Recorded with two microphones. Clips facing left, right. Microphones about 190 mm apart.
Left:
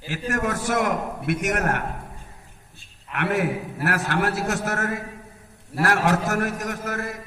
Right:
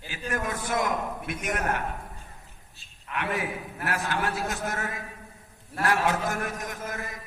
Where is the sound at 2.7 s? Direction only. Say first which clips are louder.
Left 1 dB; 70° left (ahead or behind).